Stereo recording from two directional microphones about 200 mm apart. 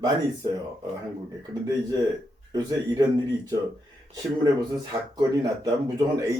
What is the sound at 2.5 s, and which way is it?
Speech, 20° right (ahead or behind).